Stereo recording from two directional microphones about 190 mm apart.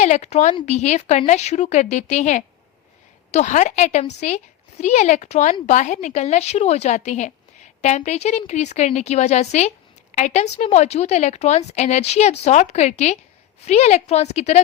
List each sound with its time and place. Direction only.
0.0 s a woman's voice: 35° left (ahead or behind)